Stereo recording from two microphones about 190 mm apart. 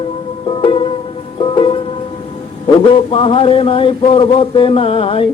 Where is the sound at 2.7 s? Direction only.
30° left (ahead or behind).